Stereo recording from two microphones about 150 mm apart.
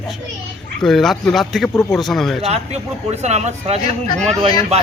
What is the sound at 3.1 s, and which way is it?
Speech, 50° right (ahead or behind).